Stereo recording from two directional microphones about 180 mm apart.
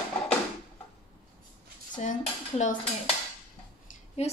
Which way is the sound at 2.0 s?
45° left (ahead or behind).